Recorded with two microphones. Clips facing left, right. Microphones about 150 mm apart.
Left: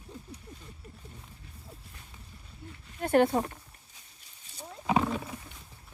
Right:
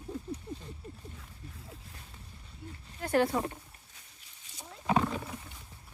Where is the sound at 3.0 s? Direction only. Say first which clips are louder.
Left 4 dB; 55° left (ahead or behind).